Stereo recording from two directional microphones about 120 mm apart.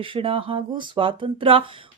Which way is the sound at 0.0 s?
45° right (ahead or behind).